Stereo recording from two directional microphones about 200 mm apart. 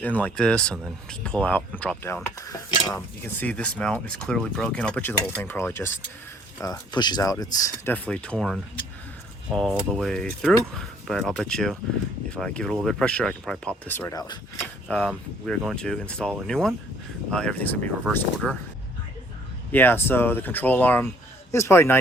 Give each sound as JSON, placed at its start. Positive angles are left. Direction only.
{"t": 0.0, "sound": "speech", "side_deg": 10}
{"t": 2.4, "sound": "stir", "side_deg": 20}
{"t": 3.2, "sound": "speech", "side_deg": 5}
{"t": 14.6, "sound": "speech", "side_deg": 5}
{"t": 19.7, "sound": "speech", "side_deg": 10}